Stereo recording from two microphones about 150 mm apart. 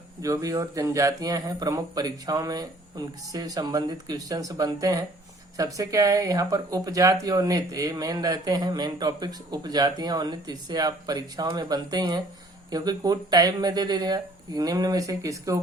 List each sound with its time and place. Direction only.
0.2 s speech: 20° right (ahead or behind)